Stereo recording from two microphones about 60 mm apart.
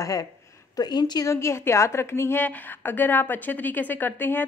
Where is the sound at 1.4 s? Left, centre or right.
Left.